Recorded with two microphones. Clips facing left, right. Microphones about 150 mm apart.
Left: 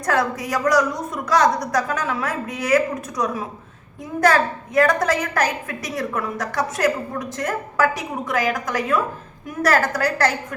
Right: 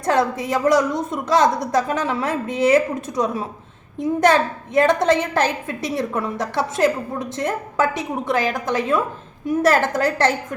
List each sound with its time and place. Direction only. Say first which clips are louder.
0.0 s a woman's voice: right 2 dB; 25° right (ahead or behind)